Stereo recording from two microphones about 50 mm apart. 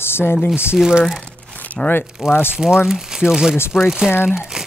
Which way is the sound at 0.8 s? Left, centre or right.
Centre.